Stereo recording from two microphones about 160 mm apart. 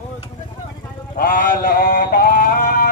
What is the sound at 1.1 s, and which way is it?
Male singing, 60° left (ahead or behind).